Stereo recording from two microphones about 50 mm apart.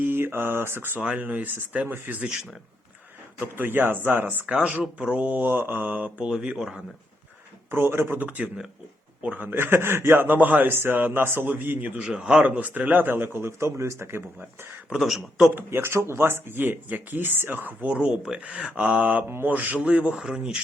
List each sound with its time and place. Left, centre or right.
0.0 s mantra: right
1.0 s speech: right
3.4 s speech: right
4.4 s speech: right
5.1 s speech: right
6.6 s a man's voice: centre
7.7 s speech: right
10.7 s speech: right
11.4 s speech: right
11.9 s a man's voice: centre
12.4 s speech: right
14.8 s a man's voice: centre
15.5 s speech: right
18.0 s speech: centre